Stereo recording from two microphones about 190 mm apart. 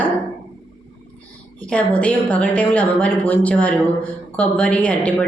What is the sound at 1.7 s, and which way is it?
Speech, 5° left (ahead or behind).